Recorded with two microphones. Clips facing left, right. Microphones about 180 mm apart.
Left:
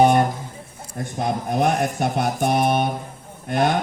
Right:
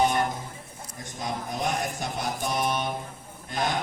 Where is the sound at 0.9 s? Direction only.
60° left (ahead or behind).